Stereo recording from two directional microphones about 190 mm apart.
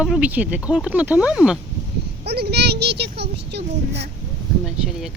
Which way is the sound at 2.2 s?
60° right (ahead or behind).